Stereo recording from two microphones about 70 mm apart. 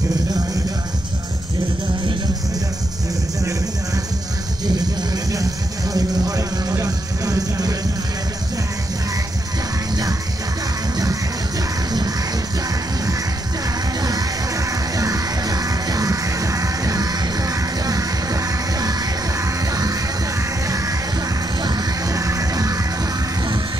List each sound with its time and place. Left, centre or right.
4.6 s a sound: right
5.9 s music: right
14.7 s music: right
22.1 s music: right